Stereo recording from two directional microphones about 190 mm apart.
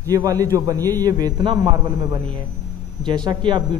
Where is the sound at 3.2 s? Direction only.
25° right (ahead or behind).